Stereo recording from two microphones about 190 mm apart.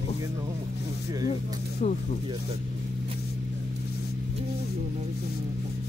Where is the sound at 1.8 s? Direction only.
40° left (ahead or behind).